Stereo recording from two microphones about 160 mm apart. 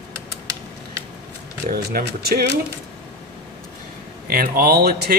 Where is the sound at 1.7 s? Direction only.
70° right (ahead or behind).